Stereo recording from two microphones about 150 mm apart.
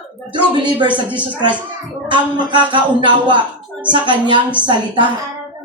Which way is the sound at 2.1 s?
30° right (ahead or behind).